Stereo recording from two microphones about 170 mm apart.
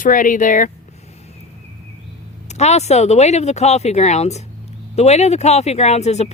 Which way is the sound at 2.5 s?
40° left (ahead or behind).